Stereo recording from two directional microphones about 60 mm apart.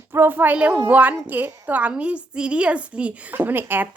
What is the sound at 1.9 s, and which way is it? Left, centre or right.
A woman's voice, centre.